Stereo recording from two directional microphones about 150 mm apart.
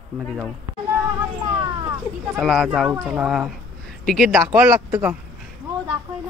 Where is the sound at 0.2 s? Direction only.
Centre (ahead or behind).